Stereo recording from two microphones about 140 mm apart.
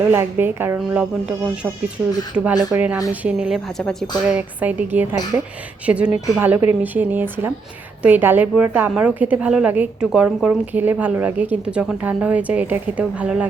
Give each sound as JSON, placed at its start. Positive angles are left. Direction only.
{"t": 0.0, "sound": "a woman's voice", "side_deg": -15}